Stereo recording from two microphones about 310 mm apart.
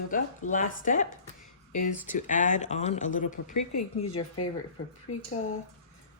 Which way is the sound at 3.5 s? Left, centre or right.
Left.